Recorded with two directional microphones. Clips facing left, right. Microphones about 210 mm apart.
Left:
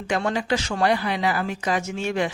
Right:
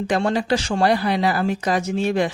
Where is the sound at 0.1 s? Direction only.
35° right (ahead or behind).